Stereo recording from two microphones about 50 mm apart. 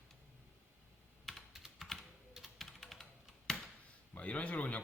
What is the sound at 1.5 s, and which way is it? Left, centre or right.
Computer keyboard, centre.